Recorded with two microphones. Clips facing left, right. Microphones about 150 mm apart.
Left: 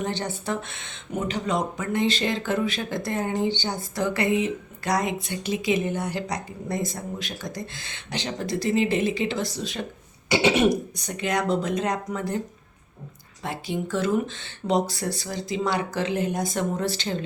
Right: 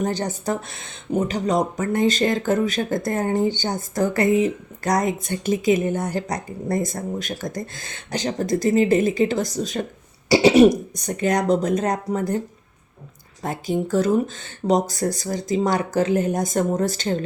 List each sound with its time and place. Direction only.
0.0 s speech: 40° right (ahead or behind)
10.2 s throat clearing: 35° right (ahead or behind)
10.9 s speech: 45° right (ahead or behind)
13.4 s speech: 45° right (ahead or behind)